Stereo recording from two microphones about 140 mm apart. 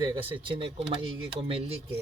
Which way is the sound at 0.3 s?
35° right (ahead or behind).